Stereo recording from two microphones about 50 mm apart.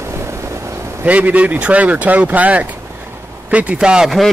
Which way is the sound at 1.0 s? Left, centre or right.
Right.